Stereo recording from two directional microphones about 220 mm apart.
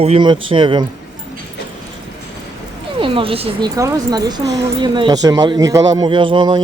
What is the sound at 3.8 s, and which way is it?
A man's voice, 15° right (ahead or behind).